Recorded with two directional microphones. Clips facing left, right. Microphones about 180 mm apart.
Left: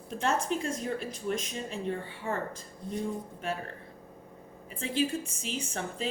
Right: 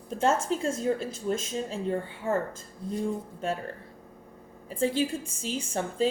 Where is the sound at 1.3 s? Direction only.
30° right (ahead or behind).